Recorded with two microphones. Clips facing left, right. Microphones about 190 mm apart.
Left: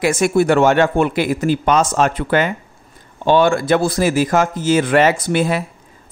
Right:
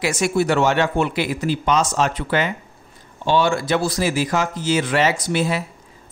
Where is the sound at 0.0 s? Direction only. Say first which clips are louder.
Left 5 dB; 55° left (ahead or behind).